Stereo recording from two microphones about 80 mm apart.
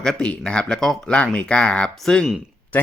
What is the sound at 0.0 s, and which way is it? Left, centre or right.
Speech, centre.